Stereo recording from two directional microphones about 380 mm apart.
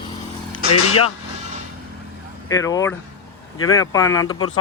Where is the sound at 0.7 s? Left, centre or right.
Left.